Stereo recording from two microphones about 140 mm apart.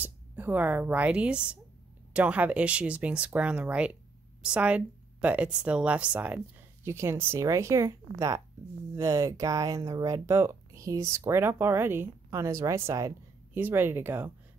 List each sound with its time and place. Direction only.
0.0 s speech: 15° right (ahead or behind)